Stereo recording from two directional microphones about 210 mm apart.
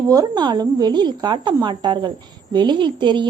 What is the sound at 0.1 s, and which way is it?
Speech, 20° right (ahead or behind).